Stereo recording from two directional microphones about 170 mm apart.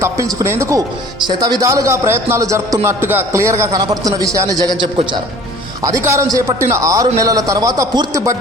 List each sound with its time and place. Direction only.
0.0 s speech: 20° right (ahead or behind)
6.1 s a man's voice: 20° right (ahead or behind)